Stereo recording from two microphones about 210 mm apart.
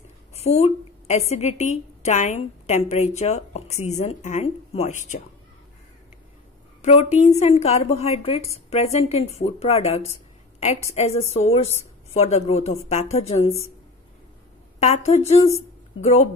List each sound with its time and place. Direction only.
0.3 s a sound: 30° left (ahead or behind)
1.3 s a woman's voice: 30° left (ahead or behind)
6.8 s a woman's voice: 35° left (ahead or behind)
14.8 s a woman's voice: 30° left (ahead or behind)